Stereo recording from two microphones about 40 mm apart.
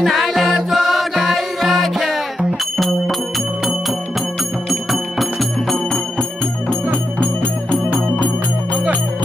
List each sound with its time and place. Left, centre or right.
0.0 s music: centre
4.6 s music: centre
7.7 s music: left